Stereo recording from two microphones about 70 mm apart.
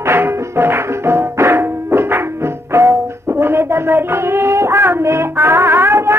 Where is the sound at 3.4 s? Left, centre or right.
Right.